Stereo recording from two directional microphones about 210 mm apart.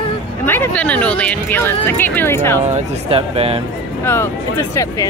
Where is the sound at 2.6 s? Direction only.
30° right (ahead or behind).